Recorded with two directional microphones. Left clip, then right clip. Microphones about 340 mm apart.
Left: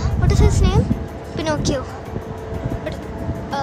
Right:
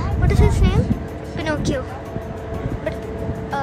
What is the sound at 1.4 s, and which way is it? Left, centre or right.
Music, centre.